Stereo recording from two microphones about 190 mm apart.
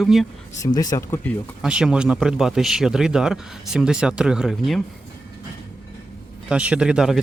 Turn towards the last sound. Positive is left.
turn(degrees=-5)  # may be behind; listen again after turning